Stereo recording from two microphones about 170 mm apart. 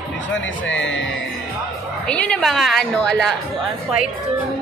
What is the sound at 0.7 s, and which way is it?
Speech, 90° left.